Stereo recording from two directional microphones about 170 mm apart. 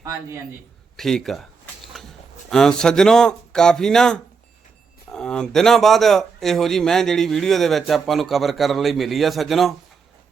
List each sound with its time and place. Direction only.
0.0 s a man's voice: 20° right (ahead or behind)
0.9 s a sound: centre (ahead or behind)
2.5 s a man's voice: 5° left (ahead or behind)